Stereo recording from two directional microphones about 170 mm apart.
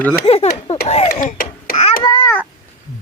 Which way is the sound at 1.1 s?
50° left (ahead or behind).